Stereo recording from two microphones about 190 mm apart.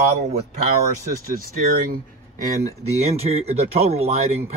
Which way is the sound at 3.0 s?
35° right (ahead or behind).